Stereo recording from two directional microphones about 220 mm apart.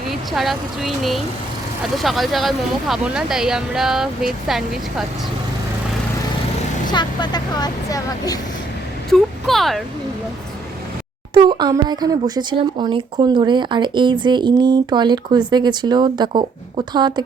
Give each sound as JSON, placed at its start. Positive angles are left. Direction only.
{"t": 0.1, "sound": "speech", "side_deg": 0}
{"t": 6.9, "sound": "speech", "side_deg": 20}
{"t": 9.0, "sound": "speech", "side_deg": 0}
{"t": 11.3, "sound": "a woman's voice", "side_deg": -20}